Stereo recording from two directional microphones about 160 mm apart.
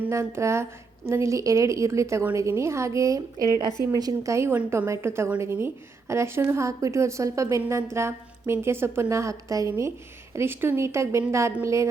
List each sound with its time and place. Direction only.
0.0 s a woman's voice: 15° right (ahead or behind)